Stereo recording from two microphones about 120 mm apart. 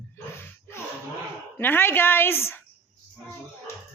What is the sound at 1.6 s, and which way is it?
A woman's voice, 15° left (ahead or behind).